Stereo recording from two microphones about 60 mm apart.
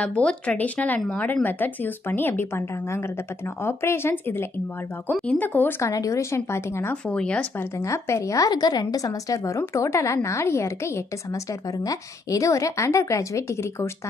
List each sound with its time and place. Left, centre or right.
0.0 s speech: centre; by 2.6 s left
3.6 s a woman's voice: left
5.8 s a woman's voice: left
7.1 s speech: centre
7.8 s a woman's voice: left
9.8 s a woman's voice: left
11.8 s a woman's voice: left